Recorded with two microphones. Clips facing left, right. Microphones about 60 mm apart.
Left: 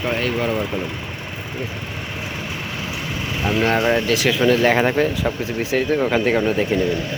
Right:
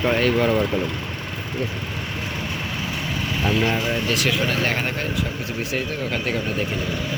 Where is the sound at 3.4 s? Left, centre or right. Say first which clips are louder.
Left 2 dB; left.